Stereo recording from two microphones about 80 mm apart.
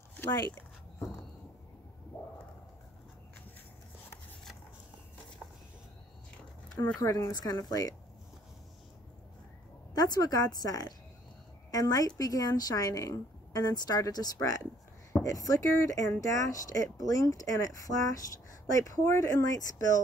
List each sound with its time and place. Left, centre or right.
7.0 s speech: left
9.9 s speech: left